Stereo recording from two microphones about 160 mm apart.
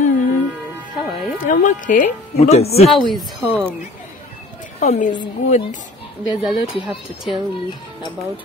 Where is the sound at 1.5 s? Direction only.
55° left (ahead or behind).